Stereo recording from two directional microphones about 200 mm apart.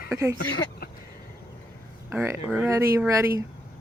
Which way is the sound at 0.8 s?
50° left (ahead or behind).